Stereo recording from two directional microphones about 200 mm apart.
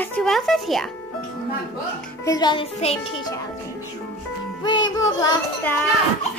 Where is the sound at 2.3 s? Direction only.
20° left (ahead or behind).